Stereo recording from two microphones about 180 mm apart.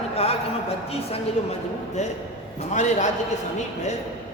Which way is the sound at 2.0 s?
40° left (ahead or behind).